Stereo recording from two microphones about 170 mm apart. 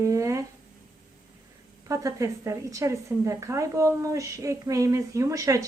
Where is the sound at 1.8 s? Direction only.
20° right (ahead or behind).